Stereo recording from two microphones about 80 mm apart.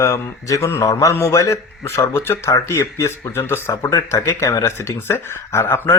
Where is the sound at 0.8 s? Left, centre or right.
Left.